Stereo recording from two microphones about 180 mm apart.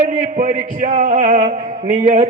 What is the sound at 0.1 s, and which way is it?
A man's voice, 40° right (ahead or behind).